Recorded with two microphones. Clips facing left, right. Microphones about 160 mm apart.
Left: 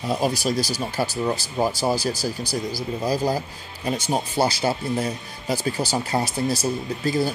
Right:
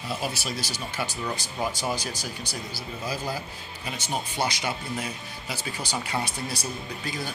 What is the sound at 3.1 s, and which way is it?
Speech, 40° left (ahead or behind).